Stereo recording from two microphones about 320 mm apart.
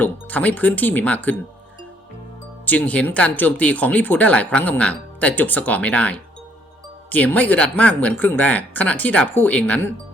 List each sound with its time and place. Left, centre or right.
0.0 s speech: centre
2.6 s speech: centre